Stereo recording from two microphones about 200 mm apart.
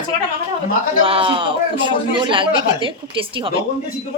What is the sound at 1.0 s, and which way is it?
A man's voice, 25° right (ahead or behind).